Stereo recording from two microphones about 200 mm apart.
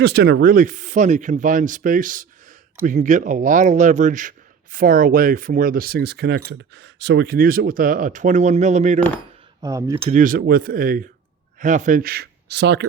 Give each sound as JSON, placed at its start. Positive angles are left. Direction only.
{"t": 0.0, "sound": "speech", "side_deg": -55}
{"t": 9.6, "sound": "cutlery", "side_deg": -15}
{"t": 10.1, "sound": "speech", "side_deg": -40}